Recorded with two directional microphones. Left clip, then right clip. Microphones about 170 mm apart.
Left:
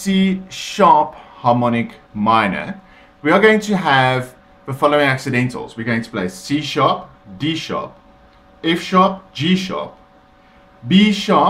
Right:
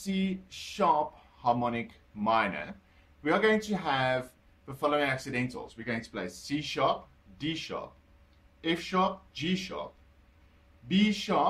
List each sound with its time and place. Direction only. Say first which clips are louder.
0.0 s speech: left 15 dB; 15° left (ahead or behind)
1.4 s speech: left 13 dB; centre (ahead or behind)
10.9 s speech: left 14 dB; 5° left (ahead or behind)